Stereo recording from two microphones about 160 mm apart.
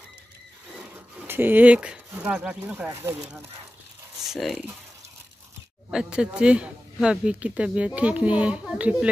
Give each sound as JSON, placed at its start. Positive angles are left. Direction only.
{"t": 0.7, "sound": "speech", "side_deg": -10}
{"t": 4.2, "sound": "speech", "side_deg": 0}
{"t": 5.9, "sound": "speech", "side_deg": -5}